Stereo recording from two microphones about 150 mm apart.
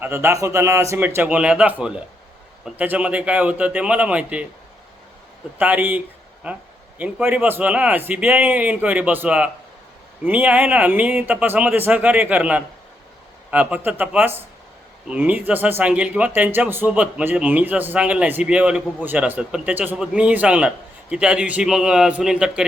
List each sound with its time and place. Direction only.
0.0 s speech: 15° right (ahead or behind)
5.5 s speech: 10° right (ahead or behind)